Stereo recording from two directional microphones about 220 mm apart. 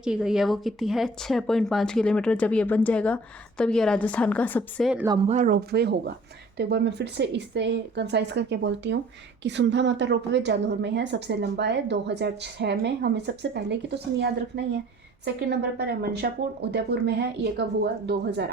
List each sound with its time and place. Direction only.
0.0 s speech: 5° right (ahead or behind)
5.3 s a woman's voice: 40° right (ahead or behind)